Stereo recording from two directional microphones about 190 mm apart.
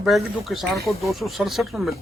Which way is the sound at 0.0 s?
Centre (ahead or behind).